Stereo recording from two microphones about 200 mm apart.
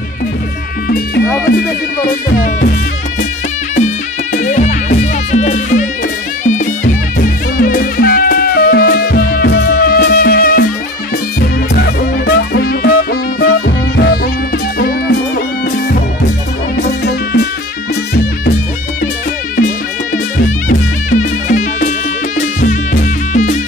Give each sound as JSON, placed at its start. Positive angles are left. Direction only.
{"t": 1.5, "sound": "speech", "side_deg": 45}
{"t": 3.7, "sound": "music", "side_deg": 35}
{"t": 12.3, "sound": "music", "side_deg": 50}
{"t": 20.4, "sound": "music", "side_deg": 40}